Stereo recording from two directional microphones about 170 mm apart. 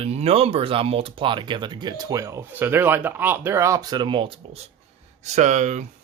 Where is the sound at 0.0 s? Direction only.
35° right (ahead or behind).